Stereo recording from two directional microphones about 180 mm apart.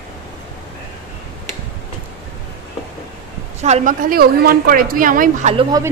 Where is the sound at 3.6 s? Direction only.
45° right (ahead or behind).